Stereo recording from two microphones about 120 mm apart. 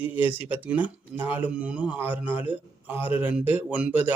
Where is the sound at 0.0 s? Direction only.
15° right (ahead or behind).